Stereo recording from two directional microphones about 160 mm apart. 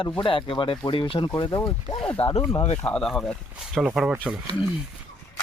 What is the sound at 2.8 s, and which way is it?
Speech, 5° left (ahead or behind).